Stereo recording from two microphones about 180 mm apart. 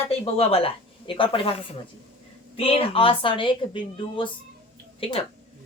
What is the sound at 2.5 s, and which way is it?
A woman's voice, 30° left (ahead or behind).